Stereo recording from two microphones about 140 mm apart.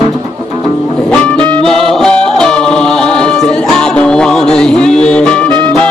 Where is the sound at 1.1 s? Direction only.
5° left (ahead or behind).